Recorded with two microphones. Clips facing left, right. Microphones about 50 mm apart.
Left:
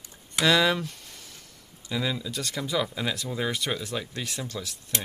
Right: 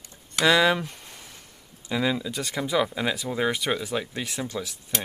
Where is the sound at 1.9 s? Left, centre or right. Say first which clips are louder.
Right 4 dB; centre.